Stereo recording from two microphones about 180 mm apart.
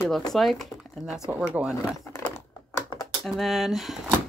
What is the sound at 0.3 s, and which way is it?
Speech, centre (ahead or behind).